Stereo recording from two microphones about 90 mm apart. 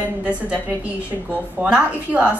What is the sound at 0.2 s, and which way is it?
Speech, 15° right (ahead or behind).